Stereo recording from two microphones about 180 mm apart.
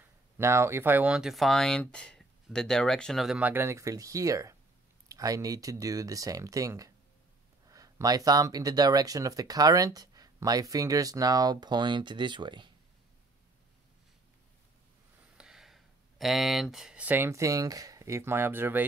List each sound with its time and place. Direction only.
0.0 s speech: 15° right (ahead or behind)
15.3 s speech: 5° right (ahead or behind)